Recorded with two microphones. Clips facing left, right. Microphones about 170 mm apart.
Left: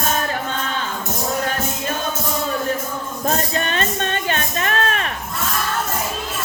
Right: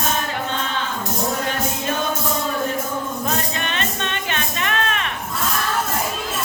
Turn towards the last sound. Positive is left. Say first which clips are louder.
# left 2 dB
turn(degrees=40)  # may be behind; listen again after turning